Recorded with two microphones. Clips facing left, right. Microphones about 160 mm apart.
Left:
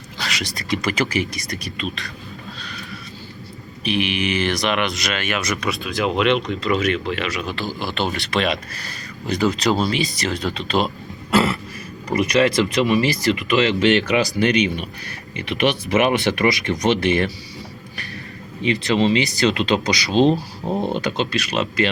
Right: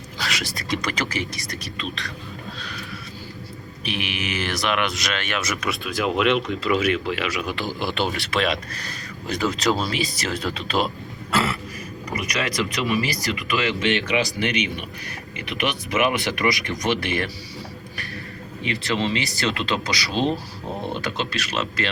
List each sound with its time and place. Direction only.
0.2 s speech: centre (ahead or behind)
3.8 s speech: centre (ahead or behind)
11.3 s throat clearing: 20° left (ahead or behind)
12.2 s speech: 25° left (ahead or behind)
13.8 s speech: 40° left (ahead or behind)
15.4 s speech: 30° left (ahead or behind)
18.6 s speech: 20° left (ahead or behind)